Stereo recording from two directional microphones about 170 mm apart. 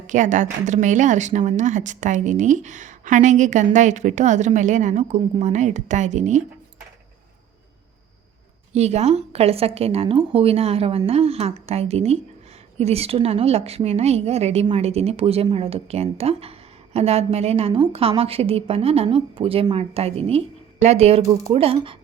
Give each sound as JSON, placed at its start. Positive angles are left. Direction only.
{"t": 0.1, "sound": "speech", "side_deg": -45}
{"t": 8.7, "sound": "a woman's voice", "side_deg": -40}